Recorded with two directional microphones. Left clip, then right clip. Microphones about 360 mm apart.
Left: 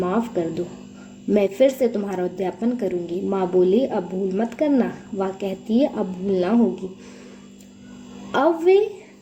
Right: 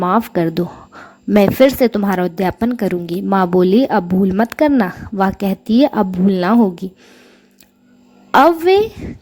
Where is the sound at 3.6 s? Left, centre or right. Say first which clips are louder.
Right 5 dB; right.